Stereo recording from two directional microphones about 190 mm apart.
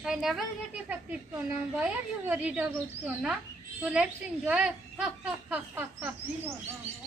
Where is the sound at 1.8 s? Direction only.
5° right (ahead or behind).